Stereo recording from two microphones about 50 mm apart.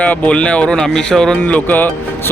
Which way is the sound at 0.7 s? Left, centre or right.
Centre.